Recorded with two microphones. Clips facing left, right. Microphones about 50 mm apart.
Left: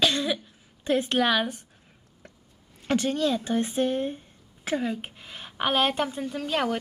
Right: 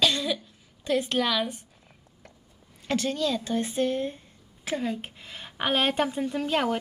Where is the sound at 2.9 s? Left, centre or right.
Left.